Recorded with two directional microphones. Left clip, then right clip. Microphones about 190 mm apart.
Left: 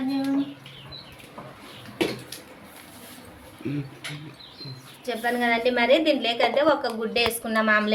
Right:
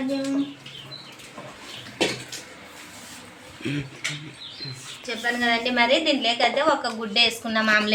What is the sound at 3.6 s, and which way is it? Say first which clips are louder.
Speech: right 2 dB; 5° left (ahead or behind).